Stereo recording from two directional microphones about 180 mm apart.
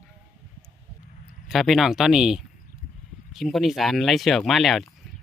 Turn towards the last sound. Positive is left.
turn(degrees=0)  # may be behind; listen again after turning